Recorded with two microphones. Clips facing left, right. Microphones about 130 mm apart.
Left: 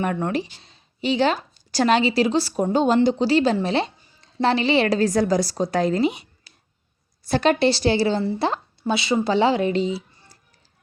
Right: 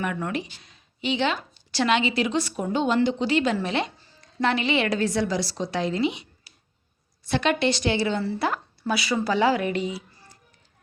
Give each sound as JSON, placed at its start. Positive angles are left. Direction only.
{"t": 0.0, "sound": "a woman's voice", "side_deg": 35}
{"t": 7.3, "sound": "speech", "side_deg": 40}
{"t": 8.2, "sound": "a woman's voice", "side_deg": 25}